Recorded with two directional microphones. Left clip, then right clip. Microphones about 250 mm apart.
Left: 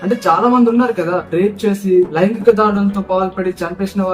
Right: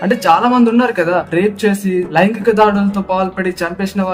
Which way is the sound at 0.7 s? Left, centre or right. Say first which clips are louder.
Right 2 dB; right.